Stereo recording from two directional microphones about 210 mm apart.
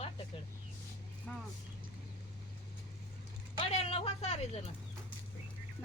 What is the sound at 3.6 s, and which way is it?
Speech, 25° left (ahead or behind).